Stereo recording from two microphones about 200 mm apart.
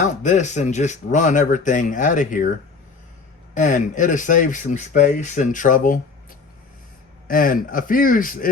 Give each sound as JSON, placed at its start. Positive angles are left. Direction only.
{"t": 0.2, "sound": "speech", "side_deg": 35}
{"t": 3.5, "sound": "speech", "side_deg": 40}
{"t": 7.3, "sound": "a man's voice", "side_deg": 45}